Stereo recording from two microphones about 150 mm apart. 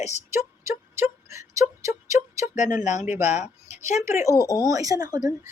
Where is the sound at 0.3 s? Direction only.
15° right (ahead or behind).